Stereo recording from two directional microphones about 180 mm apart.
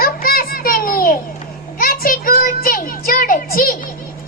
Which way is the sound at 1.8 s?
50° left (ahead or behind).